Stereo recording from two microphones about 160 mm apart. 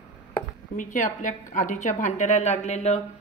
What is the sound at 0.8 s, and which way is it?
A woman's voice, 55° left (ahead or behind).